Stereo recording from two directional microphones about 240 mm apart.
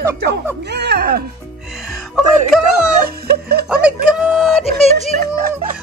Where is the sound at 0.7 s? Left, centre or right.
Right.